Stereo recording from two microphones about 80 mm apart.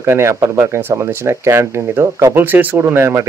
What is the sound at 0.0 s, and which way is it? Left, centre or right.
Speech, right.